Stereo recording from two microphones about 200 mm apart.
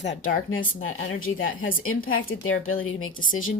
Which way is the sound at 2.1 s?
85° left.